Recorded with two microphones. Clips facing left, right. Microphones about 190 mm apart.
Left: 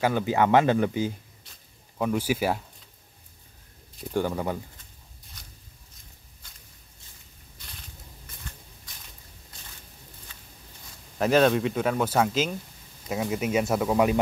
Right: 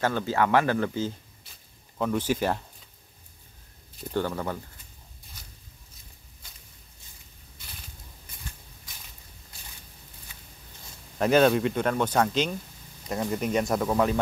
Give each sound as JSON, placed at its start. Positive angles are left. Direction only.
{"t": 0.0, "sound": "speech", "side_deg": 15}
{"t": 4.1, "sound": "speech", "side_deg": 15}
{"t": 5.4, "sound": "a sound", "side_deg": -5}
{"t": 11.1, "sound": "speech", "side_deg": 0}